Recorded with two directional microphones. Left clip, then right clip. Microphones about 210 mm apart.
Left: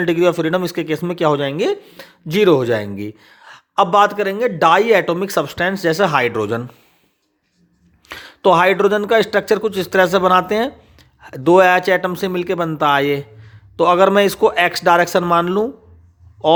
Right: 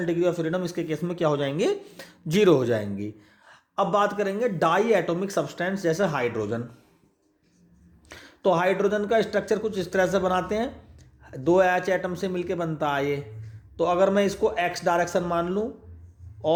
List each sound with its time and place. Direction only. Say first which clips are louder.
0.0 s speech: left 9 dB; 35° left (ahead or behind)
8.0 s a man's voice: left 9 dB; 35° left (ahead or behind)